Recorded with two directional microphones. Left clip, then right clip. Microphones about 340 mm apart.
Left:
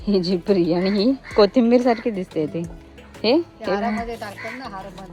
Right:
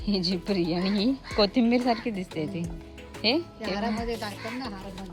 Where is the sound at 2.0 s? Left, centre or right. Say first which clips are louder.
Left 8 dB; centre.